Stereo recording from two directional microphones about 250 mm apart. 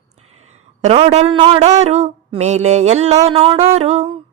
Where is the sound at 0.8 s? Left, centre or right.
Right.